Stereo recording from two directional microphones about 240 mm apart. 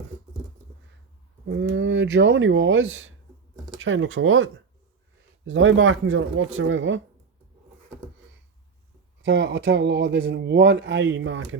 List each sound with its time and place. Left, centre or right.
1.5 s speech: right
5.5 s speech: right
9.2 s speech: right